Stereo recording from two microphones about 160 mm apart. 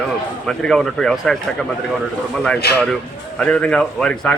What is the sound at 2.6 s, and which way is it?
Speech, 85° left.